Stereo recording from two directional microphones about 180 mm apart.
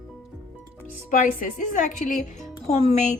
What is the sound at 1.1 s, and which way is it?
A woman's voice, 45° left (ahead or behind).